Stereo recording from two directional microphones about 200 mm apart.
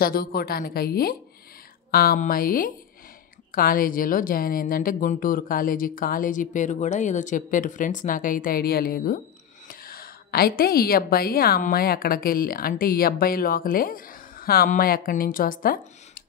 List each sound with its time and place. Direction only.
0.0 s a woman's voice: 50° left (ahead or behind)